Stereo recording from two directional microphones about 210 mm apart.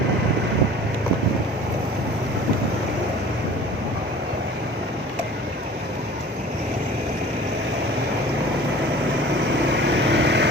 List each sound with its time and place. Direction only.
9.8 s vehicle: 60° right (ahead or behind)